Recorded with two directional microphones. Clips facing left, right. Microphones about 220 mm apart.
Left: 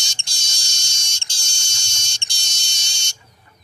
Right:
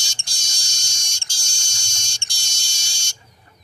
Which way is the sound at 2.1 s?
20° left (ahead or behind).